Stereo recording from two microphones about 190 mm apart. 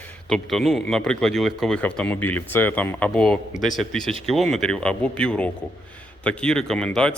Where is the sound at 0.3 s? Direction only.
Centre (ahead or behind).